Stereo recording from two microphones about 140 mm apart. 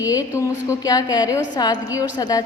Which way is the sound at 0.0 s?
25° left (ahead or behind).